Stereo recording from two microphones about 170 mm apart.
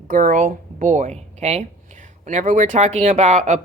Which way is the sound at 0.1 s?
50° right (ahead or behind).